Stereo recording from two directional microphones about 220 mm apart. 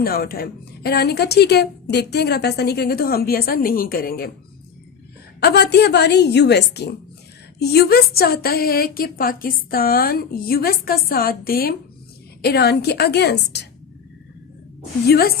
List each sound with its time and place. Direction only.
0.0 s speech: 45° left (ahead or behind)
5.4 s speech: 50° left (ahead or behind)
15.0 s speech: 45° left (ahead or behind)